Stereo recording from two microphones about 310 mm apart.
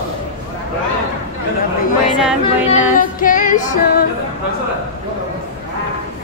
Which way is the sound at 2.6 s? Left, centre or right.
Left.